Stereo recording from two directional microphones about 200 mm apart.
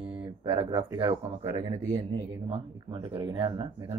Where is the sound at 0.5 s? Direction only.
25° right (ahead or behind).